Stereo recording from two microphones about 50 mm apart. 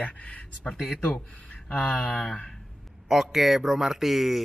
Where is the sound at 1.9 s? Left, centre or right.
Left.